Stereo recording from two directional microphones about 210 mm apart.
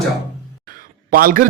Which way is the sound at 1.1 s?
45° right (ahead or behind).